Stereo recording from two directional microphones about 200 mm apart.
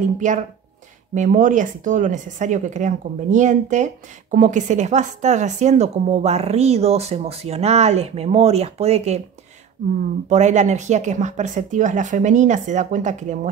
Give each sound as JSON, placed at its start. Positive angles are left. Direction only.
{"t": 0.2, "sound": "speech", "side_deg": -40}
{"t": 10.3, "sound": "speech", "side_deg": -35}